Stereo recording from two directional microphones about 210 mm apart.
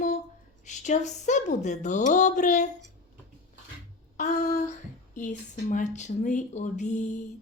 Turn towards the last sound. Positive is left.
turn(degrees=35)  # may be behind; listen again after turning